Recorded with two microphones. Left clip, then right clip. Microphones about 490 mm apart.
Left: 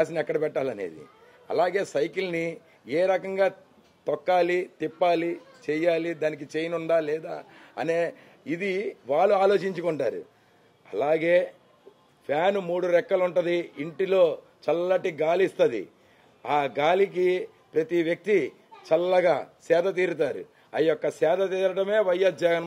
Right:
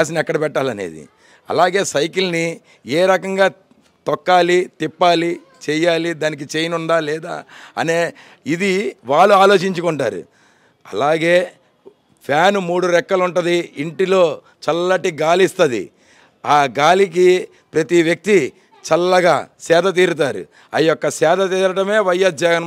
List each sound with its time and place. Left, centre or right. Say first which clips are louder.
0.0 s a man's voice: right 8 dB; right